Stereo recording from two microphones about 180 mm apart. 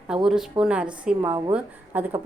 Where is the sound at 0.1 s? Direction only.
5° right (ahead or behind).